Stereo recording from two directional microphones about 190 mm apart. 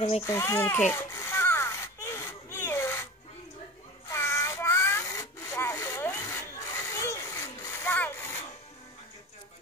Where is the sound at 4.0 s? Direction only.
15° left (ahead or behind).